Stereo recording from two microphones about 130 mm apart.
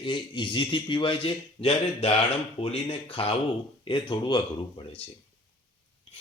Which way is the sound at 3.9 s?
35° left (ahead or behind).